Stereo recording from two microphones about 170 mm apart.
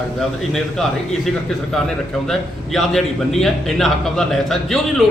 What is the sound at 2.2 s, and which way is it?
A man's voice, centre (ahead or behind).